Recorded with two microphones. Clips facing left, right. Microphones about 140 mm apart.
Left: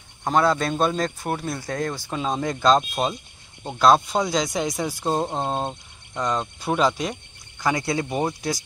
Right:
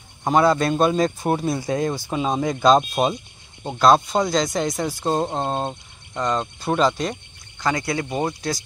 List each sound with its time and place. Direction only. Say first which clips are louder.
0.2 s speech: right 3 dB; 5° right (ahead or behind)
7.6 s speech: even; 15° left (ahead or behind)